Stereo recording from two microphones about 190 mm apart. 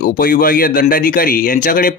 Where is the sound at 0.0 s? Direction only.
45° left (ahead or behind).